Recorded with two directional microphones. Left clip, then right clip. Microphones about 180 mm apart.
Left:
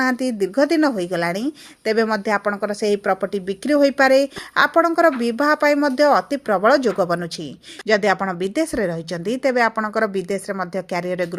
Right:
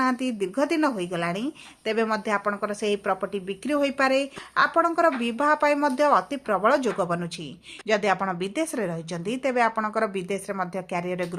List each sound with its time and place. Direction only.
0.0 s a woman's voice: 30° left (ahead or behind)